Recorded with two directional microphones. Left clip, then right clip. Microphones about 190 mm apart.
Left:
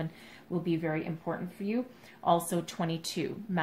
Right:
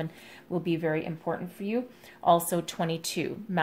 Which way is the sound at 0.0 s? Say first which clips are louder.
Right 3 dB; 45° right (ahead or behind).